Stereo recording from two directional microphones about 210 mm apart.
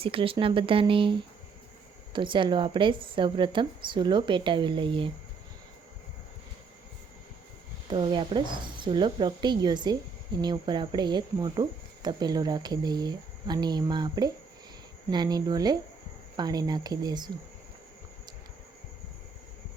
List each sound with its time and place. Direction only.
0.0 s speech: 25° right (ahead or behind)
7.9 s speech: 25° right (ahead or behind)